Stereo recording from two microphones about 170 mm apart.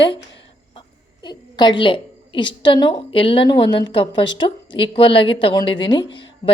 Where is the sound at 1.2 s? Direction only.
25° left (ahead or behind).